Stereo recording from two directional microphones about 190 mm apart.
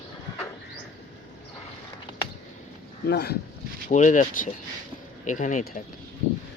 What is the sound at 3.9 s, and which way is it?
Speech, 40° left (ahead or behind).